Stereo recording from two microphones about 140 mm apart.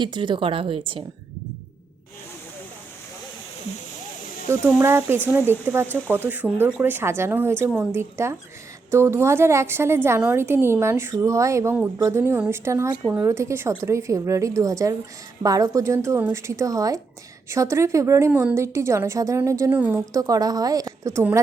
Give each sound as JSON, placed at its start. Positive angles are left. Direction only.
{"t": 0.0, "sound": "speech", "side_deg": -35}
{"t": 4.4, "sound": "a woman's voice", "side_deg": -15}